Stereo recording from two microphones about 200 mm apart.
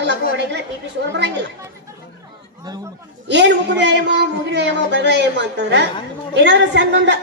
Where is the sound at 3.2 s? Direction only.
60° right (ahead or behind).